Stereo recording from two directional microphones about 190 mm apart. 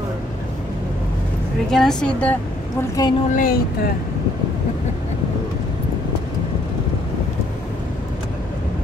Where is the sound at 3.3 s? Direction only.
50° left (ahead or behind).